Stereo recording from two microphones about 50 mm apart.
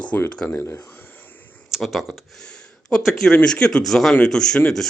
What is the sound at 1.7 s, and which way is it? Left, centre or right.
Speech, centre.